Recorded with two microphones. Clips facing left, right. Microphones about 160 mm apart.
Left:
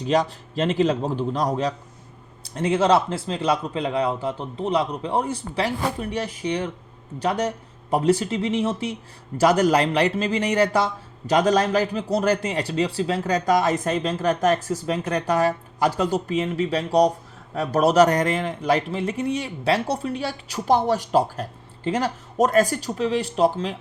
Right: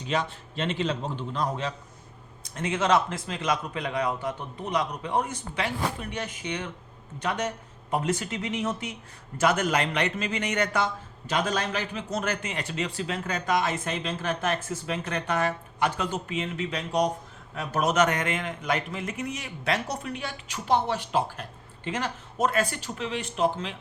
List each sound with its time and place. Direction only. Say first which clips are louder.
0.0 s a man's voice: left 8 dB; 40° left (ahead or behind)